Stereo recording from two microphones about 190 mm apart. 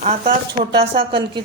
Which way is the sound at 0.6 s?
30° right (ahead or behind).